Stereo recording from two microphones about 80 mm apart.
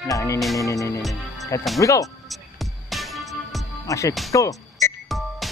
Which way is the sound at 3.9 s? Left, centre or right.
Left.